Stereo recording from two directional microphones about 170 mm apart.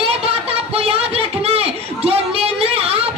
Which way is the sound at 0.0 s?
35° right (ahead or behind).